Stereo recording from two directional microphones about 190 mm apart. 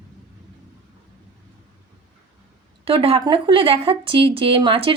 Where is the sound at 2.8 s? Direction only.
30° right (ahead or behind).